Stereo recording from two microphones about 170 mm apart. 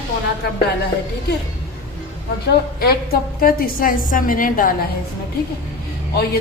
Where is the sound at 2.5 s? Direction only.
65° left (ahead or behind).